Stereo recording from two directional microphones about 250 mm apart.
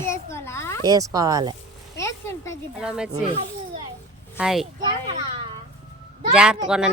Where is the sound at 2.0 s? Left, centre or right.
Centre.